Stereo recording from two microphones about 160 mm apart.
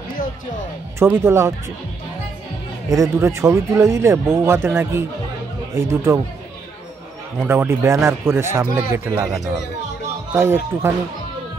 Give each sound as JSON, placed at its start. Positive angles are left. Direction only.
{"t": 0.9, "sound": "speech", "side_deg": -15}
{"t": 2.9, "sound": "speech", "side_deg": -20}
{"t": 7.3, "sound": "speech", "side_deg": -15}
{"t": 10.3, "sound": "speech", "side_deg": -15}